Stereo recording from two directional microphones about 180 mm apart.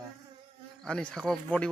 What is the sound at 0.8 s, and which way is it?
Speech, 5° left (ahead or behind).